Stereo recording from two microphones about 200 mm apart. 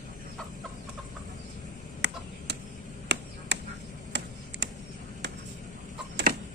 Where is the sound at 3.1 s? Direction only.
60° right (ahead or behind).